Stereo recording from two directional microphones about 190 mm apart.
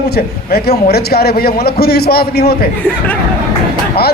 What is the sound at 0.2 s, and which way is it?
A man's voice, 55° left (ahead or behind).